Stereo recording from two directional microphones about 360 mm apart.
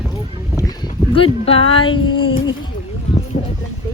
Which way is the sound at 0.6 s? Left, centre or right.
Centre.